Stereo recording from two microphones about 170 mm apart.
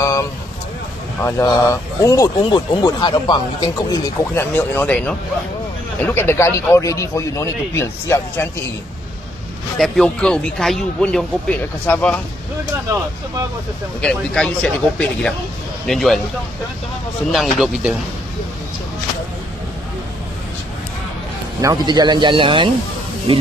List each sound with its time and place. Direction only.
1.2 s speech: 20° left (ahead or behind)
4.6 s speech: 10° left (ahead or behind)
9.8 s speech: 5° left (ahead or behind)
14.0 s speech: 5° left (ahead or behind)
17.3 s speech: centre (ahead or behind)
21.5 s speech: 20° right (ahead or behind)